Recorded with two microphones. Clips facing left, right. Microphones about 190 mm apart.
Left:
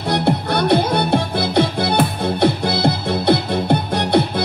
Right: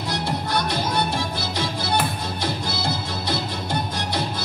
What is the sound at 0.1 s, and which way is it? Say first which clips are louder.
Music: left 8 dB; 60° left (ahead or behind).